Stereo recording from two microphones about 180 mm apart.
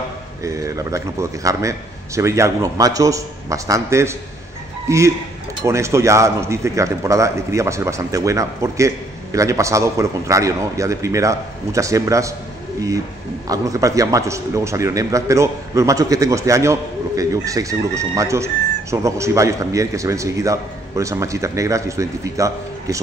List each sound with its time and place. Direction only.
0.4 s a man's voice: 15° right (ahead or behind)
13.5 s a man's voice: 20° right (ahead or behind)